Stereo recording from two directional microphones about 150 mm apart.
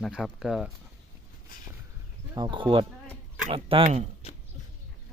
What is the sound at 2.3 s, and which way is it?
Speech, 30° right (ahead or behind).